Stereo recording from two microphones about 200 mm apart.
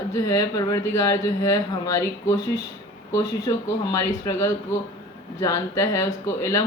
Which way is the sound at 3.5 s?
20° left (ahead or behind).